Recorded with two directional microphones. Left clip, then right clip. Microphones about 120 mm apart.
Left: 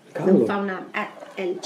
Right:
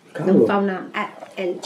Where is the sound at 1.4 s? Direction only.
35° left (ahead or behind).